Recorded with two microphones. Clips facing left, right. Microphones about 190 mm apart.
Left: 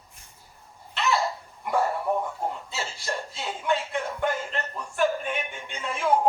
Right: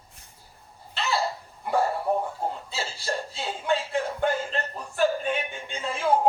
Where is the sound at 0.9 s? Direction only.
30° right (ahead or behind).